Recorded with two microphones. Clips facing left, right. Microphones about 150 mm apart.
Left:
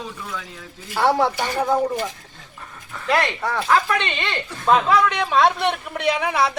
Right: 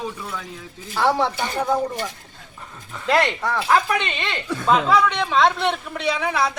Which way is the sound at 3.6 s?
10° right (ahead or behind).